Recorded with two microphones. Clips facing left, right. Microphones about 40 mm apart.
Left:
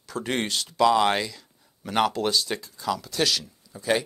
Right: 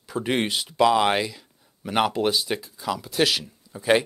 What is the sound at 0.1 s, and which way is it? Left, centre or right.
Speech, centre.